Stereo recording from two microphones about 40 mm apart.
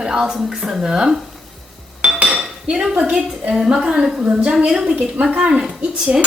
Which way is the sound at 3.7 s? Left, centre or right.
Right.